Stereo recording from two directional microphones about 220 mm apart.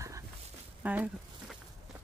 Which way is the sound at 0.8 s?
5° right (ahead or behind).